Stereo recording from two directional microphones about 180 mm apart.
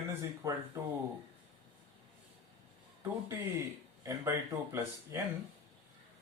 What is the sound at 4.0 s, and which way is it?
Speech, 15° right (ahead or behind).